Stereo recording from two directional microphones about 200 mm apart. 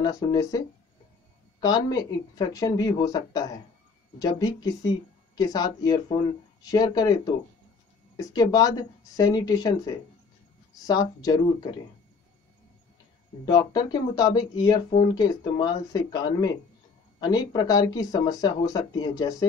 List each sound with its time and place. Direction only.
0.0 s speech: 20° left (ahead or behind)
8.2 s speech: 20° left (ahead or behind)
13.5 s speech: 20° left (ahead or behind)